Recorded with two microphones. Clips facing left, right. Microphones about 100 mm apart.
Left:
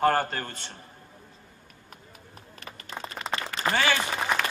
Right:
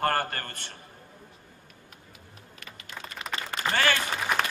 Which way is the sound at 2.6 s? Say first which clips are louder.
Left 4 dB; 35° left (ahead or behind).